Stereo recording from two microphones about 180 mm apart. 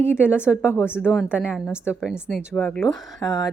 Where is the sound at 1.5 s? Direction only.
Centre (ahead or behind).